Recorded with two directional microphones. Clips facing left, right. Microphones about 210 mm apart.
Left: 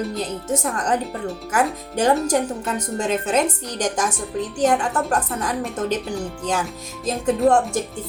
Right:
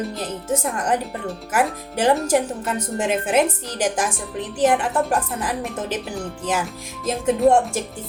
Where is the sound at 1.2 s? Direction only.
5° right (ahead or behind).